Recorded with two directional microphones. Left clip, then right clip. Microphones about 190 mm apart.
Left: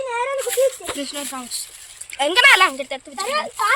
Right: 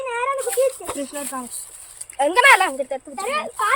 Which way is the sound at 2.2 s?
40° right (ahead or behind).